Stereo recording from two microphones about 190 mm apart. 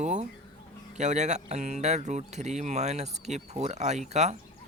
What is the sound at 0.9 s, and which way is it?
Speech, 35° right (ahead or behind).